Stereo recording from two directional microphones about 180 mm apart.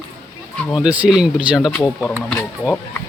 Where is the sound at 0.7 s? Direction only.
5° right (ahead or behind).